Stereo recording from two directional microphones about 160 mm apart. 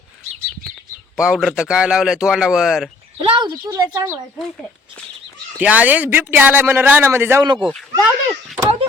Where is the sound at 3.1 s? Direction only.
30° right (ahead or behind).